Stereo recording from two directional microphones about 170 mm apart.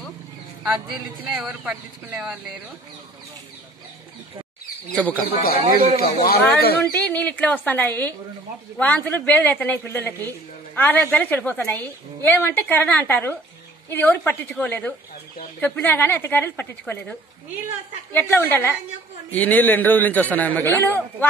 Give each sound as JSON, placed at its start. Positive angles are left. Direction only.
{"t": 0.7, "sound": "speech", "side_deg": -10}
{"t": 4.9, "sound": "a woman's voice", "side_deg": 10}
{"t": 5.9, "sound": "speech", "side_deg": 65}
{"t": 6.8, "sound": "a woman's voice", "side_deg": 10}
{"t": 18.1, "sound": "a woman's voice", "side_deg": 10}